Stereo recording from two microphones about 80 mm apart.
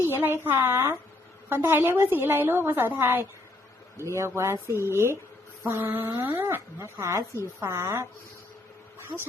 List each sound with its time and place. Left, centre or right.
0.1 s a woman's voice: right
6.9 s speech: right